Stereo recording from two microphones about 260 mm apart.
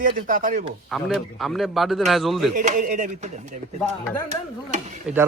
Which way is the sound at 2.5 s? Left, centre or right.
Right.